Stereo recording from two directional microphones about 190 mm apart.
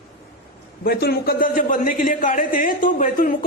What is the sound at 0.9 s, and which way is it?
A man's voice, 55° left (ahead or behind).